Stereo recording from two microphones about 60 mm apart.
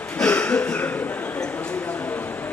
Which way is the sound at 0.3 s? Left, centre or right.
Left.